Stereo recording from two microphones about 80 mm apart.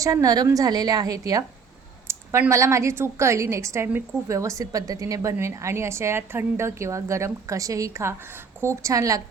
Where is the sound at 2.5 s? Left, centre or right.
Right.